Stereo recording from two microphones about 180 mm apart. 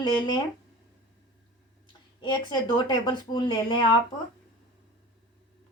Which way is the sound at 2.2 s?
25° left (ahead or behind).